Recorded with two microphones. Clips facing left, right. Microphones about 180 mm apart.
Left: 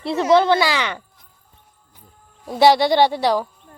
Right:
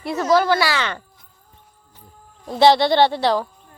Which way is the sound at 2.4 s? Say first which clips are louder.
Even; 10° left (ahead or behind).